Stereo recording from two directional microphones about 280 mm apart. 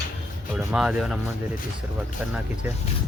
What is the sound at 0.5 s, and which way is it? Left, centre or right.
Speech, centre.